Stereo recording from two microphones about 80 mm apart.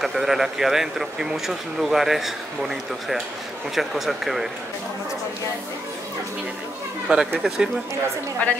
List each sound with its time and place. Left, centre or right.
0.0 s speech: centre
7.1 s speech: centre
8.4 s a woman's voice: centre